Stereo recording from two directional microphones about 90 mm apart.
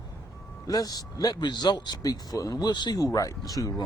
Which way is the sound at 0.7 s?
45° left (ahead or behind).